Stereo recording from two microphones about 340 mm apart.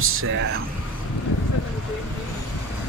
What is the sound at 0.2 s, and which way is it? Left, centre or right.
Speech, right.